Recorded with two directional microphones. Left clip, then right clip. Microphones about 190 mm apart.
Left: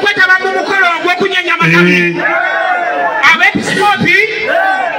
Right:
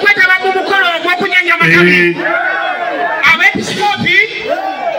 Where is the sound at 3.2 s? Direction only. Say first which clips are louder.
Left 1 dB; 50° left (ahead or behind).